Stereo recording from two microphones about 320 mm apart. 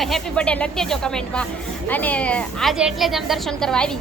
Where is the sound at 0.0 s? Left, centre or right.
Centre.